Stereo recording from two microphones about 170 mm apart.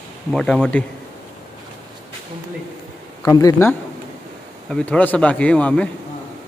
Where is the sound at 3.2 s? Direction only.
20° left (ahead or behind).